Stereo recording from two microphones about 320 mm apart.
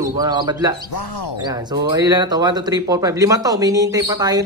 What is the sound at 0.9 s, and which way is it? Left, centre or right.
Speech, left.